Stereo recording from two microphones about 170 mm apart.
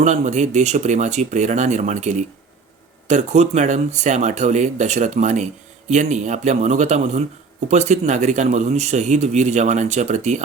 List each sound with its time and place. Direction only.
0.0 s a man's voice: 45° right (ahead or behind)